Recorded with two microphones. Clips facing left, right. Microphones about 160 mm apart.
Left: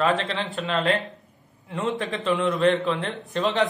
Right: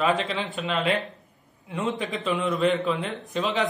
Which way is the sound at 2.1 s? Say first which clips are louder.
Left 2 dB; centre (ahead or behind).